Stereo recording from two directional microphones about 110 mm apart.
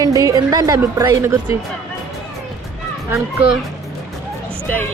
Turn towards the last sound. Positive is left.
turn(degrees=15)  # may be behind; listen again after turning